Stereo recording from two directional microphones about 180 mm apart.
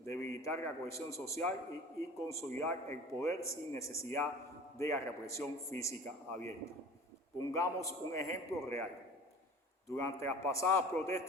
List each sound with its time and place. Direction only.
0.0 s a man's voice: 15° left (ahead or behind)
9.9 s a man's voice: 15° left (ahead or behind)